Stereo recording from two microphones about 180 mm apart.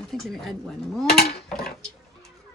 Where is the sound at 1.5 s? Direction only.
Centre (ahead or behind).